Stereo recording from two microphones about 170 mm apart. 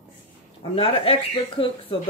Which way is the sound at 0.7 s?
35° left (ahead or behind).